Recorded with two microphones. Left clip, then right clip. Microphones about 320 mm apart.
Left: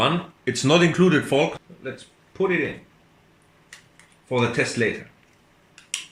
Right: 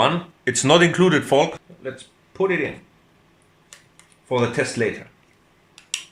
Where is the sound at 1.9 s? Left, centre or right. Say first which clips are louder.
Right 1 dB; right.